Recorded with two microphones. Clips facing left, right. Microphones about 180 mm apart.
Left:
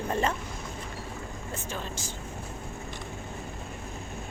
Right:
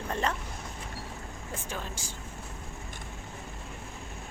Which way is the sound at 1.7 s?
10° right (ahead or behind).